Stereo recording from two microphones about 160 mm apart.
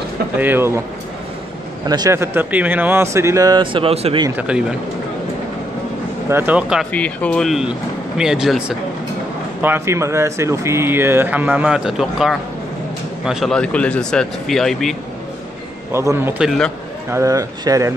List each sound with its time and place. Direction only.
0.4 s speech: 15° right (ahead or behind)
1.9 s speech: 20° right (ahead or behind); by 4.2 s 40° right (ahead or behind)
4.4 s speech: 5° right (ahead or behind)
6.2 s speech: 15° right (ahead or behind)
6.9 s a man's voice: 10° left (ahead or behind)
15.9 s speech: 15° right (ahead or behind)
16.4 s a man's voice: 5° left (ahead or behind)
17.1 s speech: 20° right (ahead or behind)